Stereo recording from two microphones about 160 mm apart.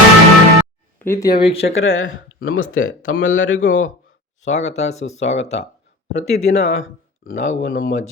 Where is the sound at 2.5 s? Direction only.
60° left (ahead or behind).